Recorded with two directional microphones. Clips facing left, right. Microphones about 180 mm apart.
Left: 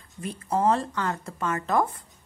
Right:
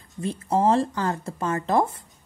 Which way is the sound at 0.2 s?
30° right (ahead or behind).